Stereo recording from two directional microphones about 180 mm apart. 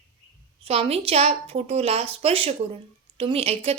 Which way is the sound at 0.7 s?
35° right (ahead or behind).